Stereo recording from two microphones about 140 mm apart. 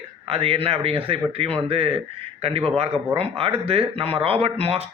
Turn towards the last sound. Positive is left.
turn(degrees=-45)  # may be behind; listen again after turning